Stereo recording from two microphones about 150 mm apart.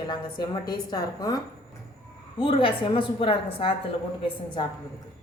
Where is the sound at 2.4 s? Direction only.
35° left (ahead or behind).